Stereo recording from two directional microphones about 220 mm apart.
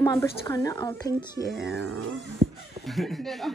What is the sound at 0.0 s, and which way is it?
Speech, 15° left (ahead or behind).